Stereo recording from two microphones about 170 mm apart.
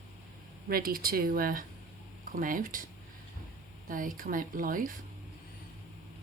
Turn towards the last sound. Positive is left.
turn(degrees=-55)  # may be behind; listen again after turning